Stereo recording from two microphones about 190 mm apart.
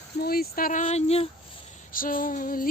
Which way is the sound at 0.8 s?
30° left (ahead or behind).